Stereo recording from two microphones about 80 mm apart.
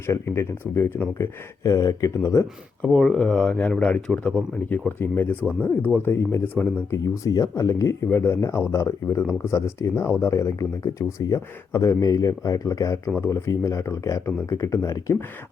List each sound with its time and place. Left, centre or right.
0.0 s speech: left
1.2 s speech: left
2.8 s speech: centre
4.9 s speech: left
6.9 s speech: left